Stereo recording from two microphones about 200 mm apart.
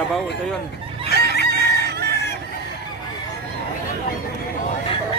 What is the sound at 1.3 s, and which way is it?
Chicken, 55° left (ahead or behind).